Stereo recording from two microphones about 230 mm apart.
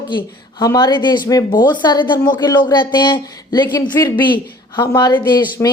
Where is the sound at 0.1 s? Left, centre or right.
Centre.